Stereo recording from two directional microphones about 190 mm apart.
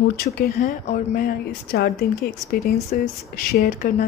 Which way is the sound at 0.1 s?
50° left (ahead or behind).